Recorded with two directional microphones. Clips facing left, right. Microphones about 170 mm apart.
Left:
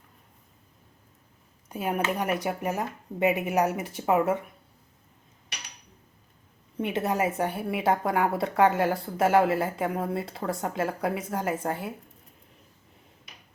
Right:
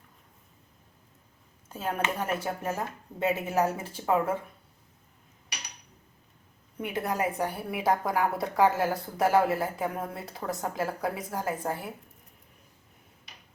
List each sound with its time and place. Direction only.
1.7 s speech: 15° left (ahead or behind)
6.7 s a woman's voice: 25° left (ahead or behind)